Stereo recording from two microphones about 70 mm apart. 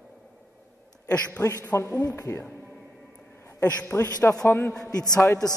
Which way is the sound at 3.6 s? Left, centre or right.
Left.